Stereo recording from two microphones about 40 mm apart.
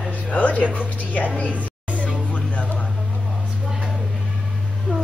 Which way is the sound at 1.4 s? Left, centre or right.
Right.